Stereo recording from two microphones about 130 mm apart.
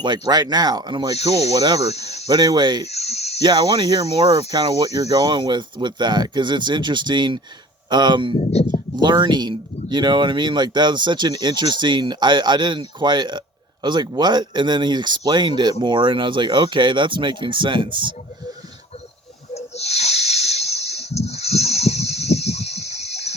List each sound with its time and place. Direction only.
0.0 s speech: 35° right (ahead or behind)
1.8 s speech: 55° left (ahead or behind)
2.2 s speech: 30° right (ahead or behind)
2.8 s a sound: 55° left (ahead or behind)
3.4 s speech: 30° right (ahead or behind)
8.4 s speech: 60° left (ahead or behind)
9.0 s speech: 35° right (ahead or behind)
19.5 s snake: 55° left (ahead or behind)